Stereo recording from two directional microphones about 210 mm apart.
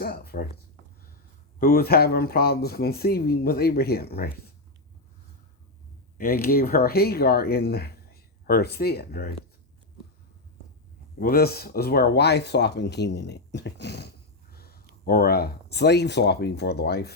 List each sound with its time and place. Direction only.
0.0 s speech: 45° left (ahead or behind)
1.5 s speech: 45° left (ahead or behind)
6.1 s speech: 45° left (ahead or behind)
11.2 s speech: 45° left (ahead or behind)